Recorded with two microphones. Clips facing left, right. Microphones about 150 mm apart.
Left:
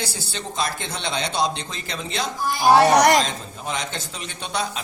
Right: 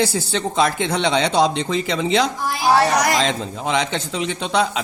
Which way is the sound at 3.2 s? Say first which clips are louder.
Right 4 dB; 90° right.